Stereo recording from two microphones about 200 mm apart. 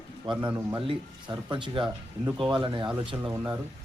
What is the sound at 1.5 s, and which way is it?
Speech, 25° right (ahead or behind).